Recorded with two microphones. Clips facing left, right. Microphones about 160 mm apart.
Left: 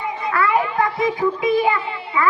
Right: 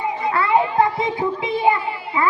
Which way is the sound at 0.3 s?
25° right (ahead or behind).